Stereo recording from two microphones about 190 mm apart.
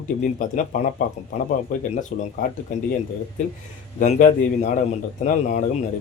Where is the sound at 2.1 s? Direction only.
45° left (ahead or behind).